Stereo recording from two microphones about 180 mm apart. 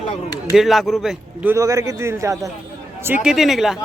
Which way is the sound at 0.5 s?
Centre (ahead or behind).